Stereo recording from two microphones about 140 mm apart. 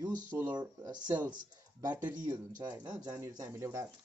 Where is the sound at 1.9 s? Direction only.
10° right (ahead or behind).